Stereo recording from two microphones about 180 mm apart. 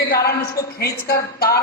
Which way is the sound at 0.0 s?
60° left (ahead or behind).